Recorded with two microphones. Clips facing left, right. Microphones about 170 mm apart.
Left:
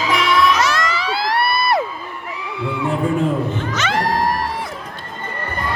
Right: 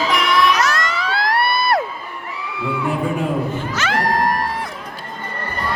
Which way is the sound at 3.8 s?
Centre (ahead or behind).